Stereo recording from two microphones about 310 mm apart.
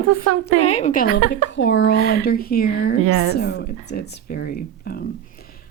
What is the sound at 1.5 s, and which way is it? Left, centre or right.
Speech, left.